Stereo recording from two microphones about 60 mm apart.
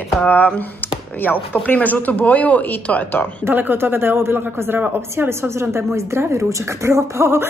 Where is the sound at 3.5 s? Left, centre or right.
Right.